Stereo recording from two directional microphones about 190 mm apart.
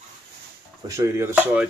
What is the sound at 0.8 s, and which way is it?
Speech, 15° right (ahead or behind).